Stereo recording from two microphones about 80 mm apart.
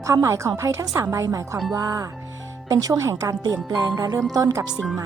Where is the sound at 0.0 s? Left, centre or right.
Right.